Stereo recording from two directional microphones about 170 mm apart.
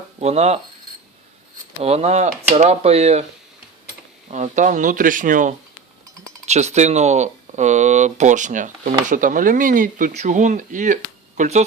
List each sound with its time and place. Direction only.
0.2 s speech: 40° right (ahead or behind)
1.8 s speech: 40° right (ahead or behind)
4.3 s speech: 45° right (ahead or behind)